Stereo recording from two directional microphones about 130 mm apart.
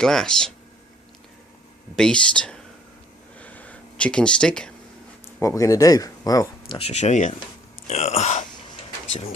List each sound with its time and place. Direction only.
0.0 s speech: 5° left (ahead or behind)
2.0 s speech: 5° left (ahead or behind)
3.3 s a sound: 10° left (ahead or behind)
5.4 s speech: 25° left (ahead or behind)
6.7 s speech: 50° left (ahead or behind); by 7.3 s 70° left (ahead or behind)
7.9 s speech: 55° left (ahead or behind)